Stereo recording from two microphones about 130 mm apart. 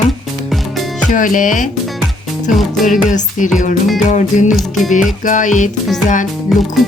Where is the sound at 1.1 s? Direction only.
90° left.